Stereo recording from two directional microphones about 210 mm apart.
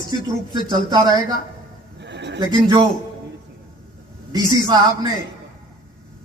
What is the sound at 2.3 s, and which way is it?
Speech, 20° right (ahead or behind).